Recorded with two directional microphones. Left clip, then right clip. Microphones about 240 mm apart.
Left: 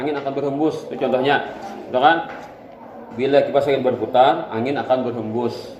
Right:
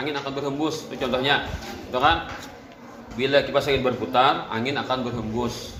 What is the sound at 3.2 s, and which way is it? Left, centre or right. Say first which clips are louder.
Speech: left 4 dB; right.